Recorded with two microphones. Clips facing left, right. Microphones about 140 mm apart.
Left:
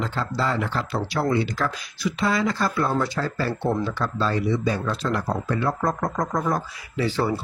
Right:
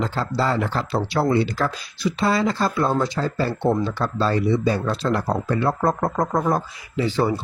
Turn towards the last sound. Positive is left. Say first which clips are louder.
# right 2 dB
turn(degrees=-20)  # may be behind; listen again after turning